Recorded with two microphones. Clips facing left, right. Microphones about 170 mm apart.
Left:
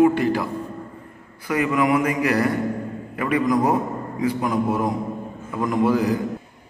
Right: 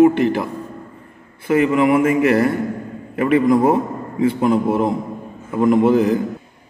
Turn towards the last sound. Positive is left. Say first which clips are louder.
# right 5 dB
turn(degrees=-25)  # may be behind; listen again after turning